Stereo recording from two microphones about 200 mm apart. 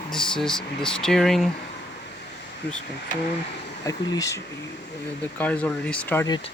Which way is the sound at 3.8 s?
15° left (ahead or behind).